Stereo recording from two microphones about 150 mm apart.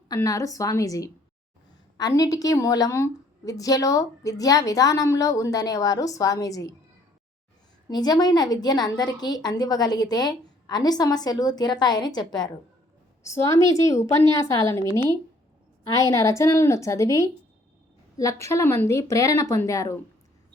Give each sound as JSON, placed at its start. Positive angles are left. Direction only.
{"t": 0.1, "sound": "a woman's voice", "side_deg": 20}
{"t": 7.9, "sound": "a woman's voice", "side_deg": 25}